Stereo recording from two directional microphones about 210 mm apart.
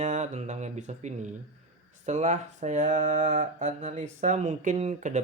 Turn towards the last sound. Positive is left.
turn(degrees=-35)  # may be behind; listen again after turning